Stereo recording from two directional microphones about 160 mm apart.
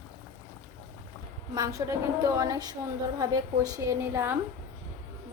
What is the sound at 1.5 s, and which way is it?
A woman's voice, 20° right (ahead or behind).